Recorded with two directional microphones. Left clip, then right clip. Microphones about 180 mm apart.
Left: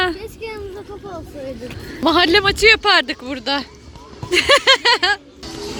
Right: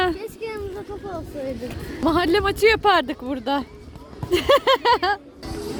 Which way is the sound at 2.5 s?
20° right (ahead or behind).